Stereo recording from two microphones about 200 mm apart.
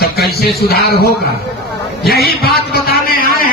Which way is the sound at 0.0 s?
50° left (ahead or behind).